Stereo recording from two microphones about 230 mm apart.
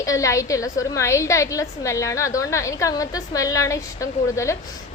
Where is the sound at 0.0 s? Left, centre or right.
Centre.